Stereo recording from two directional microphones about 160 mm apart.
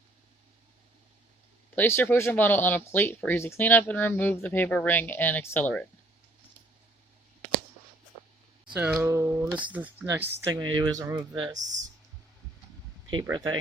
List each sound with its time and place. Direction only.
1.7 s speech: 15° left (ahead or behind)
8.7 s speech: 10° right (ahead or behind)
10.5 s speech: 25° right (ahead or behind)
13.2 s speech: 15° right (ahead or behind)